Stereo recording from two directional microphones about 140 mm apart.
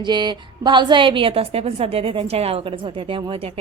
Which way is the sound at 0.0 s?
30° right (ahead or behind).